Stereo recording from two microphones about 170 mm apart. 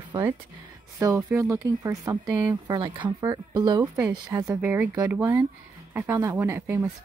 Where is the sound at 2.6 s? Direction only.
25° right (ahead or behind).